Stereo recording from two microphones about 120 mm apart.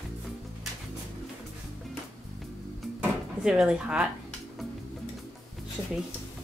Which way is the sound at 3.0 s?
5° right (ahead or behind).